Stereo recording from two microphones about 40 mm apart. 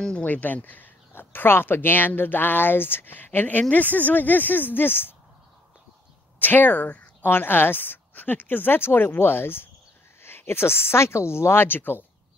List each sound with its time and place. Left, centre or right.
0.2 s speech: left
1.1 s speech: left
6.4 s speech: left
6.7 s speech: left
7.2 s a woman's voice: left